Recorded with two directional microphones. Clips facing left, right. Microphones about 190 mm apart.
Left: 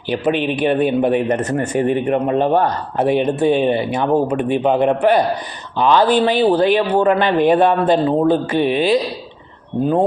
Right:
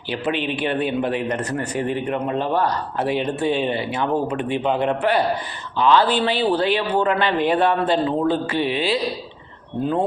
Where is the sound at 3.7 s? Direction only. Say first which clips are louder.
Left 6 dB; 15° left (ahead or behind).